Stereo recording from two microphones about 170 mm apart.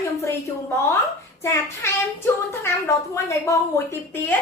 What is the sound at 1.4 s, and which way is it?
Speech, 15° left (ahead or behind).